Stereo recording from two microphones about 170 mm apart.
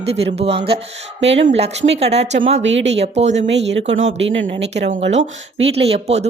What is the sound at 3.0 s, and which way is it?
Speech, 40° right (ahead or behind).